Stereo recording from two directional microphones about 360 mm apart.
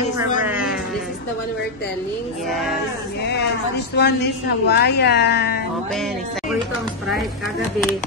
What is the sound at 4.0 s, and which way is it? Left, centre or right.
A woman's voice, left.